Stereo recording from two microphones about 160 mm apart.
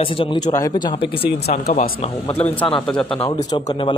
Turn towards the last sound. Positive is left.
turn(degrees=30)  # may be behind; listen again after turning